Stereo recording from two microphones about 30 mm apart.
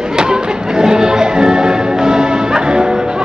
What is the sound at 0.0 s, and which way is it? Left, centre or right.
Music, right.